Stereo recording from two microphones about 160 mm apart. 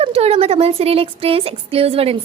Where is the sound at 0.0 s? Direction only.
40° right (ahead or behind).